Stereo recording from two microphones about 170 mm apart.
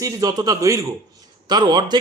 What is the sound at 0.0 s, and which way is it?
A man's voice, 25° right (ahead or behind).